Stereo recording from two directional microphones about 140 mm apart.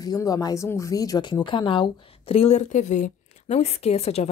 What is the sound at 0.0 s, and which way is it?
Speech, 25° left (ahead or behind).